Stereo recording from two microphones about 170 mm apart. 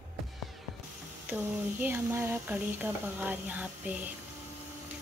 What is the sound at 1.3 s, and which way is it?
Speech, 10° right (ahead or behind).